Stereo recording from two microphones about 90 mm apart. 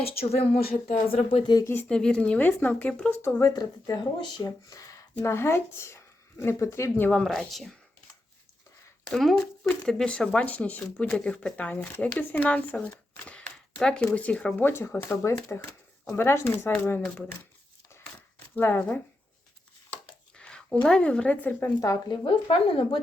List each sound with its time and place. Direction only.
0.2 s speech: 90° left
1.6 s speech: 25° left (ahead or behind)
1.9 s speech: 10° left (ahead or behind)
3.2 s speech: 25° left (ahead or behind)
3.4 s speech: 45° left (ahead or behind)
7.1 s speech: 5° left (ahead or behind)
9.6 s speech: 10° left (ahead or behind)
18.5 s speech: 20° left (ahead or behind)
20.3 s speech: 10° left (ahead or behind)
21.8 s speech: 40° left (ahead or behind)
22.3 s speech: 90° left